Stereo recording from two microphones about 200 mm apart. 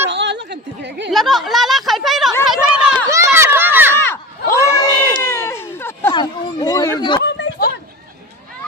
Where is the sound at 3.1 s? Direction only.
15° right (ahead or behind).